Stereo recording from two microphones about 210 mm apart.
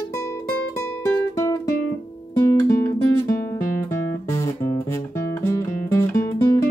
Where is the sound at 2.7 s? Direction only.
15° left (ahead or behind).